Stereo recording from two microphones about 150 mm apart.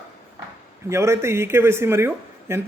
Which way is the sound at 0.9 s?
20° right (ahead or behind).